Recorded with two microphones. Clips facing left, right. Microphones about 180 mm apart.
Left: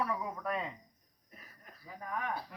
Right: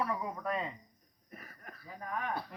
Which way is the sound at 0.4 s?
Centre (ahead or behind).